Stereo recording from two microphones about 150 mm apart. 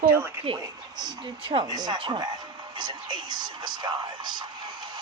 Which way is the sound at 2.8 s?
30° right (ahead or behind).